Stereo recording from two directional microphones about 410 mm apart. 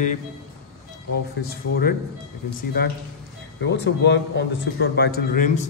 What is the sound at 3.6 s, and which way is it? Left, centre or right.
A man's voice, left.